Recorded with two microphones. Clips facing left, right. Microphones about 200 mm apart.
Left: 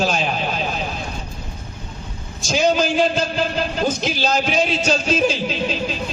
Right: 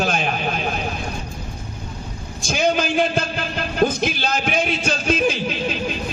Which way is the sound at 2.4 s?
55° right (ahead or behind).